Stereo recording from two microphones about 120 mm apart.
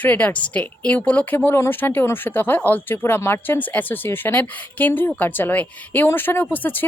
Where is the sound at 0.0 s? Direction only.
15° left (ahead or behind).